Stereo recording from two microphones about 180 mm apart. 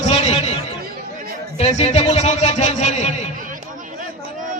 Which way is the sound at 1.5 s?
35° left (ahead or behind).